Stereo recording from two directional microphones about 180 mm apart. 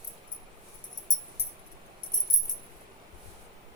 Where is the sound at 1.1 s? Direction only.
40° left (ahead or behind).